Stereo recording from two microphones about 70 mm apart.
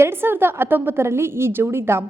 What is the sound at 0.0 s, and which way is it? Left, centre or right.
A woman's voice, right.